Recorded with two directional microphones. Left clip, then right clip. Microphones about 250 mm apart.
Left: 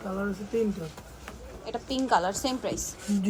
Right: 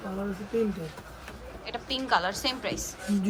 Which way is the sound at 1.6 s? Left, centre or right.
Centre.